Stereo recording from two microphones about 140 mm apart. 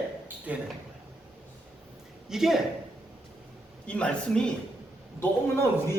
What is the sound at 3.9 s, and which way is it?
Speech, 5° left (ahead or behind).